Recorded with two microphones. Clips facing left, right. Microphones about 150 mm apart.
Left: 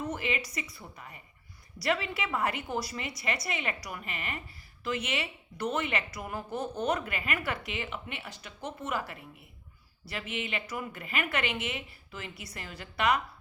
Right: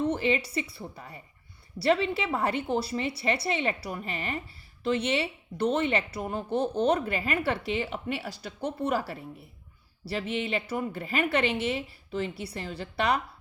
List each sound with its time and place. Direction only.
0.0 s a woman's voice: 30° right (ahead or behind)